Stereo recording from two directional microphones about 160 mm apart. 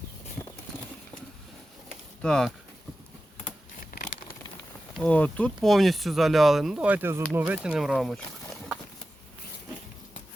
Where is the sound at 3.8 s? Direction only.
55° left (ahead or behind).